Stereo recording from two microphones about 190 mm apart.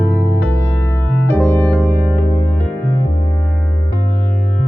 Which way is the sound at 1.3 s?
10° left (ahead or behind).